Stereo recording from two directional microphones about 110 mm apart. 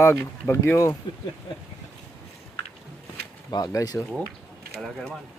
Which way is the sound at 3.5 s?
35° left (ahead or behind).